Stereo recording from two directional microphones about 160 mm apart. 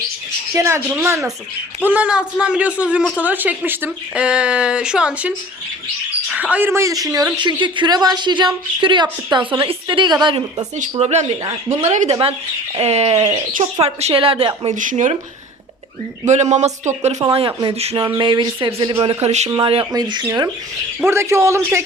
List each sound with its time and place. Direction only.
0.5 s a man's voice: 15° right (ahead or behind)
6.3 s a man's voice: 10° right (ahead or behind); by 10.7 s 30° right (ahead or behind)
10.9 s a woman's voice: 45° right (ahead or behind)
14.8 s speech: 55° right (ahead or behind)
16.2 s speech: 45° right (ahead or behind)
17.3 s a woman's voice: 30° right (ahead or behind)
19.5 s a woman's voice: 25° right (ahead or behind)